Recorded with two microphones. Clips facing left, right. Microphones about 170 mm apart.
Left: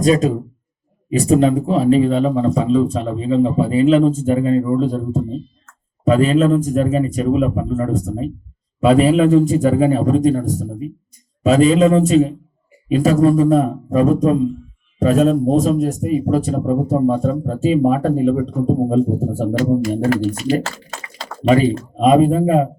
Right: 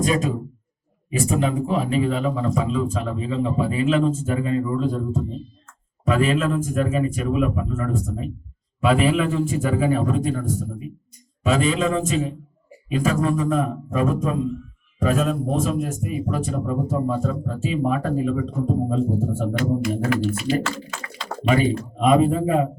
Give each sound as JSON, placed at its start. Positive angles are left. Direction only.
{"t": 1.1, "sound": "a man's voice", "side_deg": 35}